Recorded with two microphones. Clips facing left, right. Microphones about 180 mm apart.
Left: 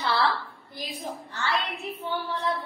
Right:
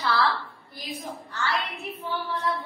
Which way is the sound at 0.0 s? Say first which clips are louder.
Right 1 dB; 30° left (ahead or behind).